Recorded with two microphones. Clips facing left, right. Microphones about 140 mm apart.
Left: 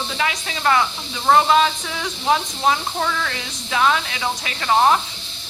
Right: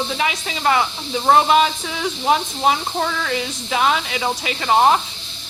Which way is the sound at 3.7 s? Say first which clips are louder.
Even; 15° right (ahead or behind).